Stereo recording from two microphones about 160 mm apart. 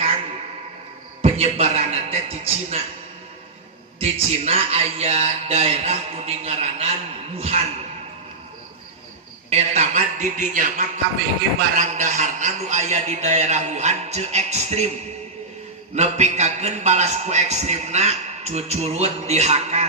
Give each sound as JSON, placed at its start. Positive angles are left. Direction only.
{"t": 1.2, "sound": "a man's voice", "side_deg": -40}
{"t": 4.0, "sound": "speech", "side_deg": -40}
{"t": 9.5, "sound": "a man's voice", "side_deg": -45}
{"t": 16.0, "sound": "a man's voice", "side_deg": -45}